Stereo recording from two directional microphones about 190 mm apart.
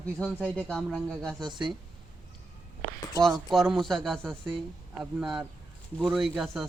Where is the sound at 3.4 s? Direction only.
Centre (ahead or behind).